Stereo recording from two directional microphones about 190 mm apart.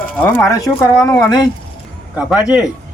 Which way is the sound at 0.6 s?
15° left (ahead or behind).